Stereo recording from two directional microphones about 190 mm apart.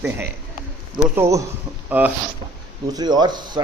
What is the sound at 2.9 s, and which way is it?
Speech, 20° right (ahead or behind).